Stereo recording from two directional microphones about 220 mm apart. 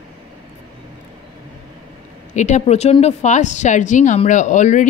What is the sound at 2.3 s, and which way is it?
A woman's voice, 35° left (ahead or behind).